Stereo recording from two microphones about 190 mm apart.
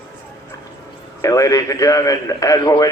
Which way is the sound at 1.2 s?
15° left (ahead or behind).